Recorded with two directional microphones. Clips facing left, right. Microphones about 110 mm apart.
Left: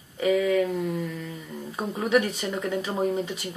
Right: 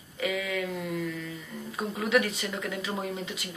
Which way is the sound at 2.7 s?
35° left (ahead or behind).